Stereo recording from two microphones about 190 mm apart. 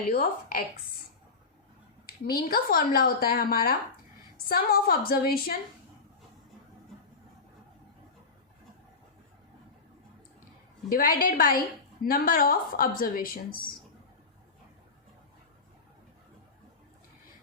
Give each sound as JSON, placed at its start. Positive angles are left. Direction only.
{"t": 0.1, "sound": "a woman's voice", "side_deg": 50}
{"t": 2.0, "sound": "a woman's voice", "side_deg": 50}
{"t": 10.8, "sound": "a woman's voice", "side_deg": 50}